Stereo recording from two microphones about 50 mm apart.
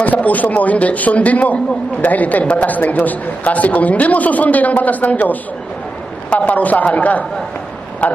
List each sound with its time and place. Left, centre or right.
0.0 s a man's voice: left